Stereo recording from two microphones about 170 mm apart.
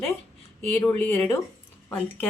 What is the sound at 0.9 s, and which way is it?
Speech, 10° left (ahead or behind).